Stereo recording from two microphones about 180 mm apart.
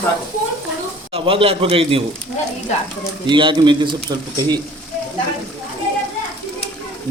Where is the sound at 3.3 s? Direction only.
25° right (ahead or behind).